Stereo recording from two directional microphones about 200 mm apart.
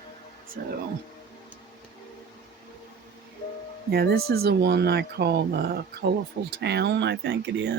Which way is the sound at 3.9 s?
50° right (ahead or behind).